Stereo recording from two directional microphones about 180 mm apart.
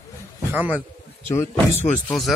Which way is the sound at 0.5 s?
10° right (ahead or behind).